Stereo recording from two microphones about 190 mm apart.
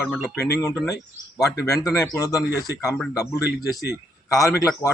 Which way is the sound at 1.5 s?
15° left (ahead or behind).